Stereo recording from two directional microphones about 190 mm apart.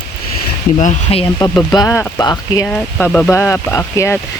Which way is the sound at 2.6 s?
5° left (ahead or behind).